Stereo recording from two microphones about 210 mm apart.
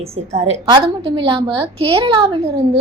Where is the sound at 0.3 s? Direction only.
30° right (ahead or behind).